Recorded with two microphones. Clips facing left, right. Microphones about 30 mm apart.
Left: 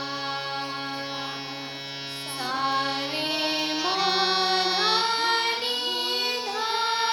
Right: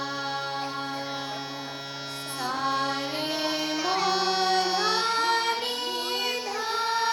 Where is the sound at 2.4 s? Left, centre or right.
Left.